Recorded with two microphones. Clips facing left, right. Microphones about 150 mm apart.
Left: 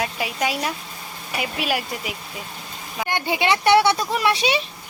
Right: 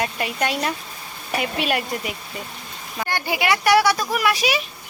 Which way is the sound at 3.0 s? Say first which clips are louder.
Left 1 dB; 20° left (ahead or behind).